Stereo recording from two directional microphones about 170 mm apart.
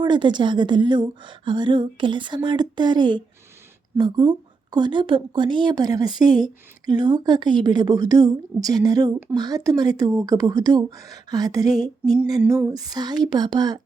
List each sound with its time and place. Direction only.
0.0 s a woman's voice: 25° right (ahead or behind)
12.4 s female singing: 10° right (ahead or behind)
12.7 s a woman's voice: 20° right (ahead or behind)